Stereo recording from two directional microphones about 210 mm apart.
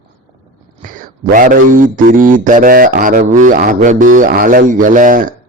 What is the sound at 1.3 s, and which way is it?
A man's voice, 40° right (ahead or behind).